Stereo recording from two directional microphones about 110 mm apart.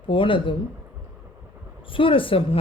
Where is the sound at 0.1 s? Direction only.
50° left (ahead or behind).